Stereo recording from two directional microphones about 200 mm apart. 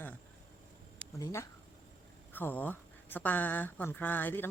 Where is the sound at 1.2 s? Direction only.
15° left (ahead or behind).